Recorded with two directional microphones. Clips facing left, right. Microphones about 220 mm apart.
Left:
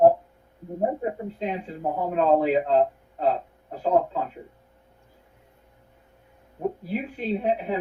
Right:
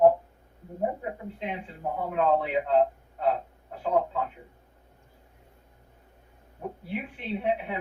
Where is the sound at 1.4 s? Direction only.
40° left (ahead or behind).